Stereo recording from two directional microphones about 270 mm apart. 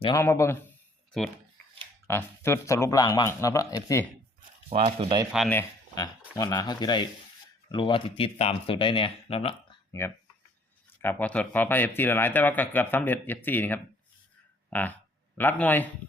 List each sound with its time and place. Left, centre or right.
0.0 s speech: centre
2.0 s speech: centre
4.7 s speech: right
5.3 s speech: centre